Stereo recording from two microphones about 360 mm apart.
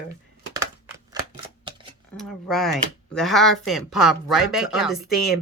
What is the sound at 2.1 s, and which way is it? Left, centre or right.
Speech, centre.